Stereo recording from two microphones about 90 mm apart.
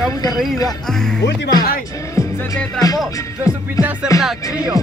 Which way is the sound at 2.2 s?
35° left (ahead or behind).